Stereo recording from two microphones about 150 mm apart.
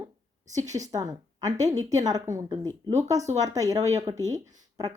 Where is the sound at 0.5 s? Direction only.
20° right (ahead or behind).